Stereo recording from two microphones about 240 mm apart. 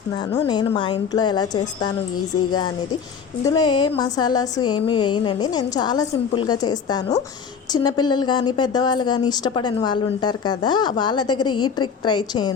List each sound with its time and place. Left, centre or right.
0.3 s speech: centre